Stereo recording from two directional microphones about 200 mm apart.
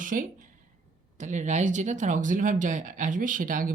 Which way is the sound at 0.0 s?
40° right (ahead or behind).